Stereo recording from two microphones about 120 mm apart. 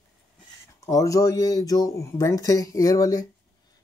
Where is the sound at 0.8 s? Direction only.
30° left (ahead or behind).